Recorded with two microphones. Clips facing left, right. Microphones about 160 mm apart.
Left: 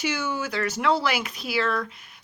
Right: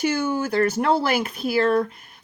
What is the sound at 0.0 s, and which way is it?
A woman's voice, 55° right (ahead or behind).